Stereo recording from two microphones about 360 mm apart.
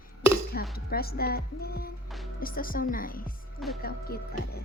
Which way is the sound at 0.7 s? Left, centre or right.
Left.